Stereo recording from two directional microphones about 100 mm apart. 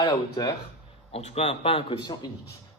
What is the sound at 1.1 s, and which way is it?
A man's voice, 90° left.